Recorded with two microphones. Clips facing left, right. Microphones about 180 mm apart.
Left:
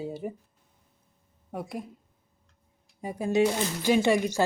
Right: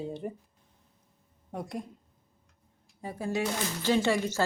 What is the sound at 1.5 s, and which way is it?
Speech, 5° left (ahead or behind).